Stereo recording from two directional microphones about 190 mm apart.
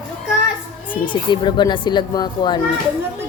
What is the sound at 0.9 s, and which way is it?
Speech, 25° left (ahead or behind).